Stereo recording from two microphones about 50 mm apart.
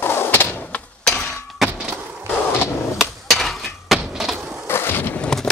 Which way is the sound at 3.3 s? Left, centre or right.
Centre.